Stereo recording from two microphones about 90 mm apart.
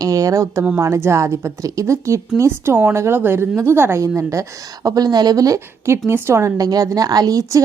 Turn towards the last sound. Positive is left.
turn(degrees=-40)  # may be behind; listen again after turning